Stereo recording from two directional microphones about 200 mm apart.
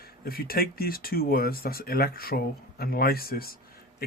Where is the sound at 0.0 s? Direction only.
50° left (ahead or behind).